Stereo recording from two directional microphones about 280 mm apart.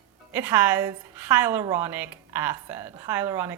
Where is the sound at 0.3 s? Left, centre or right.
Centre.